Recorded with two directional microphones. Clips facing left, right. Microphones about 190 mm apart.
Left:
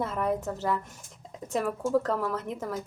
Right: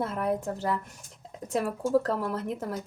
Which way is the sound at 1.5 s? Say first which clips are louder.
Right 1 dB; 10° right (ahead or behind).